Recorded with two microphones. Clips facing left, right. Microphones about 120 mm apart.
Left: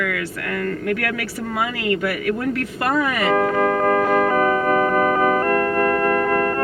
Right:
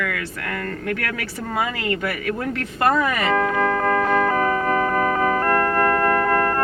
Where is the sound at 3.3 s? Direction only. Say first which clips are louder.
Left 4 dB; 30° left (ahead or behind).